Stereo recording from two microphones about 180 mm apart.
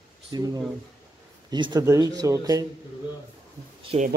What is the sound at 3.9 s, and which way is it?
Speech, 35° right (ahead or behind).